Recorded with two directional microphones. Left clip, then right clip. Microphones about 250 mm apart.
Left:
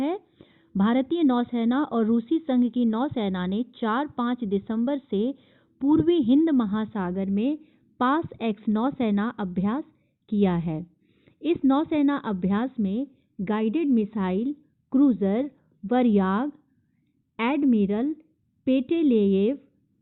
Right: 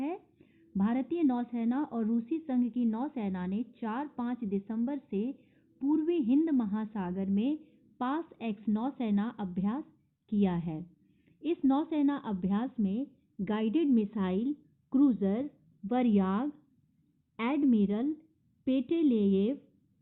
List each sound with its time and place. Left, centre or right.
0.0 s a woman's voice: left